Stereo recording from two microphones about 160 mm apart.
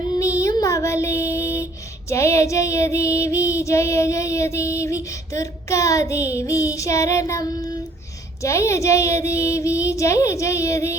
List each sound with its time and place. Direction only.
0.2 s child singing: 20° left (ahead or behind)
2.0 s female singing: 15° left (ahead or behind)